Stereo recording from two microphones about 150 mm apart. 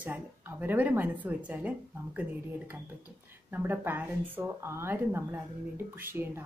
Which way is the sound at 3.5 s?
10° right (ahead or behind).